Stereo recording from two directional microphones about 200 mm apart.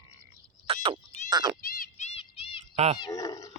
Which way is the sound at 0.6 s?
30° right (ahead or behind).